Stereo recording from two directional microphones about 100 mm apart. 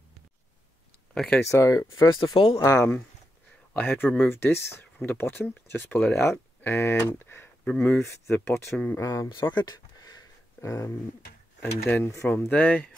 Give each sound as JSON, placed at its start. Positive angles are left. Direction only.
{"t": 1.1, "sound": "speech", "side_deg": 5}
{"t": 1.5, "sound": "speech", "side_deg": 35}
{"t": 2.3, "sound": "speech", "side_deg": 60}
{"t": 2.6, "sound": "speech", "side_deg": 35}
{"t": 3.7, "sound": "speech", "side_deg": 20}
{"t": 9.0, "sound": "speech", "side_deg": 35}
{"t": 9.3, "sound": "a sound", "side_deg": 50}
{"t": 11.9, "sound": "speech", "side_deg": 25}